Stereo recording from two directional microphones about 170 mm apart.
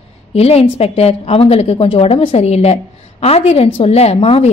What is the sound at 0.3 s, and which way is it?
A woman's voice, 35° left (ahead or behind).